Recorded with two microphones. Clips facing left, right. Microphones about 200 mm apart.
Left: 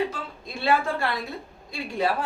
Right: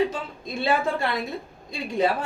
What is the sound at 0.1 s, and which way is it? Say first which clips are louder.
A woman's voice: right 4 dB; 20° right (ahead or behind).